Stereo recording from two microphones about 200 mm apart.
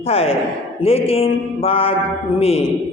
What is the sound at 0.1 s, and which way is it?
A woman's voice, 30° left (ahead or behind).